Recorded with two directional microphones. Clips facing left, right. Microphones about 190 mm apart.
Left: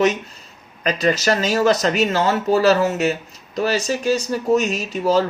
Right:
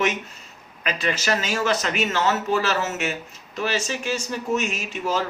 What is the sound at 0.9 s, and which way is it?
Speech, 40° left (ahead or behind).